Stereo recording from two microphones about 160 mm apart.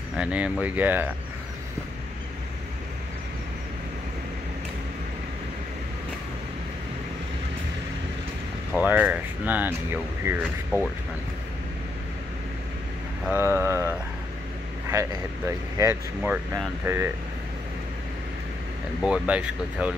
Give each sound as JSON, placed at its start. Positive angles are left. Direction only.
{"t": 0.2, "sound": "speech", "side_deg": -10}
{"t": 8.7, "sound": "speech", "side_deg": -10}
{"t": 13.2, "sound": "speech", "side_deg": -15}
{"t": 18.9, "sound": "speech", "side_deg": -5}